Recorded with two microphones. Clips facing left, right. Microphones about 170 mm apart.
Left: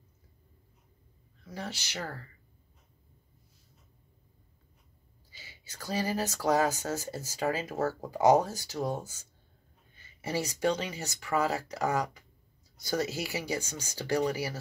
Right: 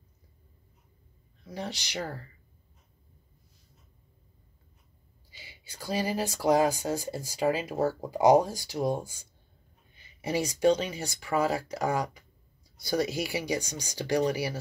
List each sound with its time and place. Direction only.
1.4 s speech: 15° right (ahead or behind)
5.3 s speech: 10° right (ahead or behind)